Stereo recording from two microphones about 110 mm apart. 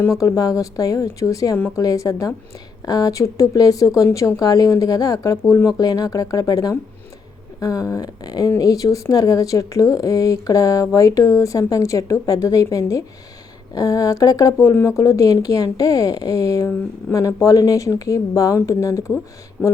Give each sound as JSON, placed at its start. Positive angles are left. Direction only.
{"t": 0.2, "sound": "speech", "side_deg": 30}
{"t": 19.6, "sound": "speech", "side_deg": 15}